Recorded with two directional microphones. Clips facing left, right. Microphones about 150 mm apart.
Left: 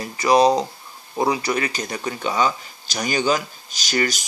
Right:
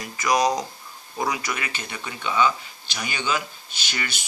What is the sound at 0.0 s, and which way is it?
Speech, 30° left (ahead or behind).